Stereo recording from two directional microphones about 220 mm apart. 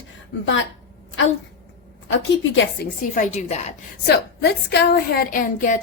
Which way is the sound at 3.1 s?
35° left (ahead or behind).